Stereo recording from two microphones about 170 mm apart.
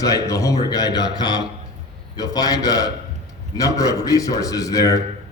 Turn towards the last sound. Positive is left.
turn(degrees=20)  # may be behind; listen again after turning